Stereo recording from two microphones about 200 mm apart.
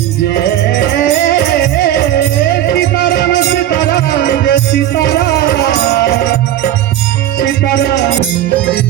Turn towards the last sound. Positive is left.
turn(degrees=65)  # may be behind; listen again after turning